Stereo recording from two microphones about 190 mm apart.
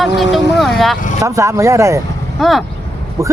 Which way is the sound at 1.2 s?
15° right (ahead or behind).